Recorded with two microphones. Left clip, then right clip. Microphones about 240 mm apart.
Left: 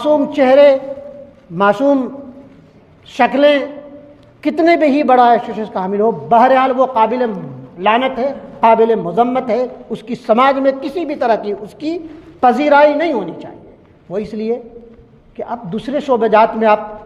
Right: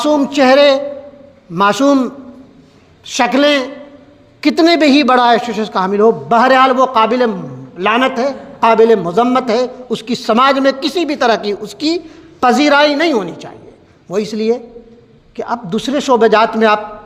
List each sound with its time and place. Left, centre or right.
0.0 s a man's voice: right
3.1 s a man's voice: right